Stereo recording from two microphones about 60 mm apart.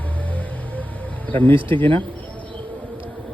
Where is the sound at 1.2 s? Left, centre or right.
Left.